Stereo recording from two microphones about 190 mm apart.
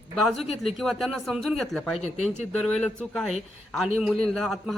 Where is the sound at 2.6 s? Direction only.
5° left (ahead or behind).